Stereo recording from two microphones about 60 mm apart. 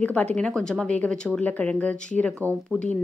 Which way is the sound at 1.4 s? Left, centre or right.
Left.